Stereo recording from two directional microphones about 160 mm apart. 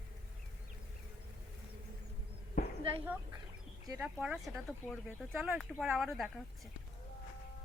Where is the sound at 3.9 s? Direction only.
10° right (ahead or behind).